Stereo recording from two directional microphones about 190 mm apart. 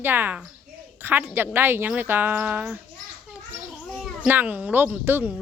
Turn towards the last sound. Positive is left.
turn(degrees=-10)  # may be behind; listen again after turning